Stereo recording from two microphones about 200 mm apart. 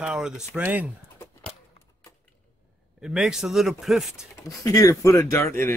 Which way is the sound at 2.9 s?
5° right (ahead or behind).